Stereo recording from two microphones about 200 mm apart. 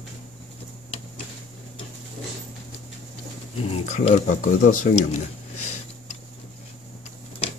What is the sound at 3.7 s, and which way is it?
Speech, 35° left (ahead or behind).